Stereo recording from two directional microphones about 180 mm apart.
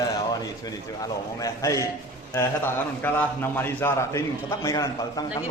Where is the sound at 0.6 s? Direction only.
20° left (ahead or behind).